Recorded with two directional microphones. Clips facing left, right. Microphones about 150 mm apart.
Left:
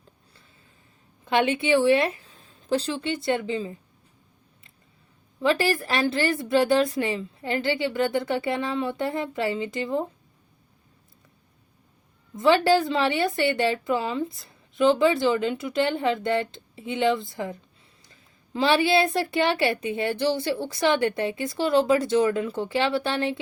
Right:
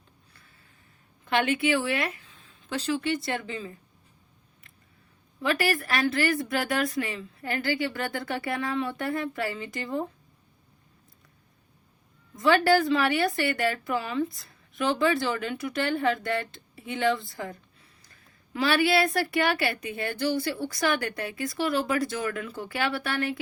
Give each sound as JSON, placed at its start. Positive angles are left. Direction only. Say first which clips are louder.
{"t": 1.2, "sound": "a woman's voice", "louder": "left 2 dB", "side_deg": 20}
{"t": 5.4, "sound": "a woman's voice", "louder": "left 4 dB", "side_deg": 30}
{"t": 12.4, "sound": "a woman's voice", "louder": "left 2 dB", "side_deg": 20}